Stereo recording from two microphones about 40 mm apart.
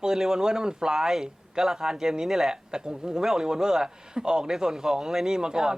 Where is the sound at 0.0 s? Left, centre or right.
Centre.